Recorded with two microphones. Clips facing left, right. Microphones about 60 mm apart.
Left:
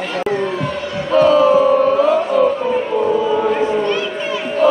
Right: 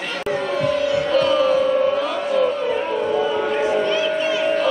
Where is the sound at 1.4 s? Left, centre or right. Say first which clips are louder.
Left 5 dB; left.